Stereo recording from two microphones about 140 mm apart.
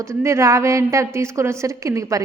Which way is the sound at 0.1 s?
20° right (ahead or behind).